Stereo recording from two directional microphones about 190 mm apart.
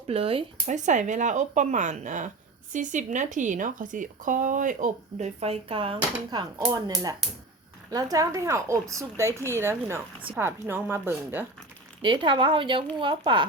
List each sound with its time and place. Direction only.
0.1 s speech: 30° right (ahead or behind); by 11.4 s 10° right (ahead or behind)
12.0 s speech: 25° right (ahead or behind)